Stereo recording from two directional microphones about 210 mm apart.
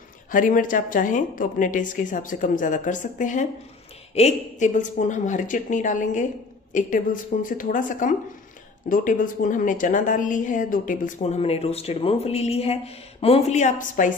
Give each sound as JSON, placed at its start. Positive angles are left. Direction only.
{"t": 0.3, "sound": "a woman's voice", "side_deg": 40}